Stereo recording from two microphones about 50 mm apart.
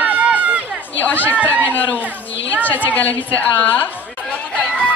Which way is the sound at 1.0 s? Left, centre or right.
Left.